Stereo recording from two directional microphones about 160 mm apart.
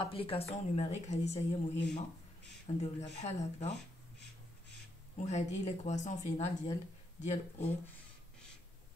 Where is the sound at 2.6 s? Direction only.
45° left (ahead or behind).